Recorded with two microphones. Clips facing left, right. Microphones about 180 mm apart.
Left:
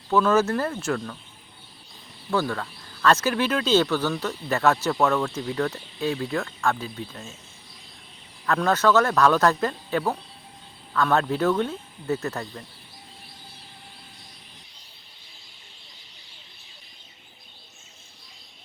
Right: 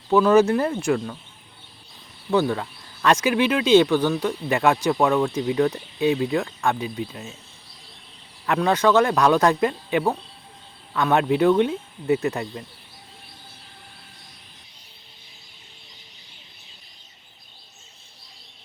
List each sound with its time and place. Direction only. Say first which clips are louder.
0.1 s speech: right 4 dB; 15° right (ahead or behind)
2.3 s speech: right 4 dB; 20° right (ahead or behind)
8.4 s speech: right 2 dB; 15° right (ahead or behind)